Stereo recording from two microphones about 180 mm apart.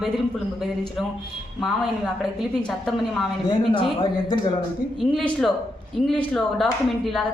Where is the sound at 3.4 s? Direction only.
30° left (ahead or behind).